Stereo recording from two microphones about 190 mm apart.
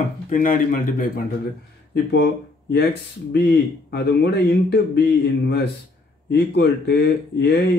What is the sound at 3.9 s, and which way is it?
Speech, 60° left (ahead or behind).